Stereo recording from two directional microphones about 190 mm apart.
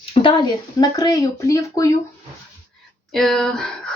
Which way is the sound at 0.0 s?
30° left (ahead or behind).